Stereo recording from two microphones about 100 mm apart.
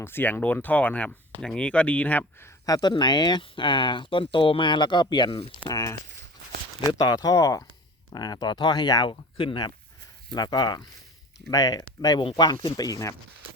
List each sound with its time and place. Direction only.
0.0 s speech: 20° left (ahead or behind)
2.6 s speech: 40° left (ahead or behind)
5.6 s speech: 35° left (ahead or behind); by 9.7 s 55° left (ahead or behind)
10.3 s speech: 45° left (ahead or behind)